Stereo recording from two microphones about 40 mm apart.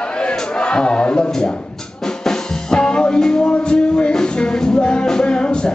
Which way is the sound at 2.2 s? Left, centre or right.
Centre.